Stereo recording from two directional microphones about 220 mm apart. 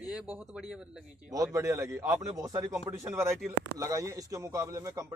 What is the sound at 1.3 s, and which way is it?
A man's voice, 15° right (ahead or behind).